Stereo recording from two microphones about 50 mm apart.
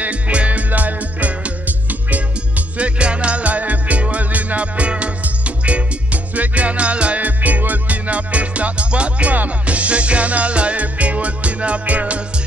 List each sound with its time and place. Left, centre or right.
0.0 s music: right